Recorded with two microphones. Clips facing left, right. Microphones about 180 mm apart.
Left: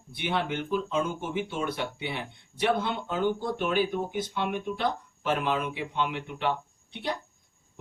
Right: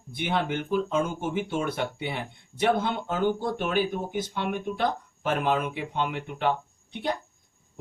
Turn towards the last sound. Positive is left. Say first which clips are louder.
# right 3 dB
turn(degrees=-45)  # may be behind; listen again after turning